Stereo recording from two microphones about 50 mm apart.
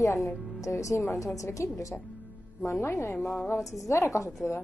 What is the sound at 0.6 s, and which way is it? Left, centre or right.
A woman's voice, left.